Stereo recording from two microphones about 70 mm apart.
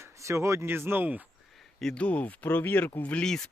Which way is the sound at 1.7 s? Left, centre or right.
Centre.